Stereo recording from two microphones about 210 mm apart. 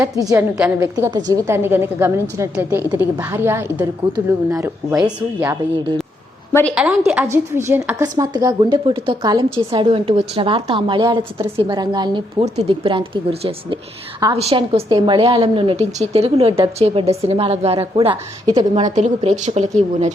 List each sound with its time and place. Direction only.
0.3 s a woman's voice: 10° right (ahead or behind)
6.5 s a woman's voice: 10° left (ahead or behind)
6.7 s a woman's voice: 5° right (ahead or behind); by 18.8 s 20° right (ahead or behind)
18.9 s speech: 30° right (ahead or behind)